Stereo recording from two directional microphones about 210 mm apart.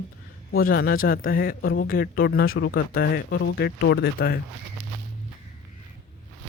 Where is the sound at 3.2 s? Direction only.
60° left (ahead or behind).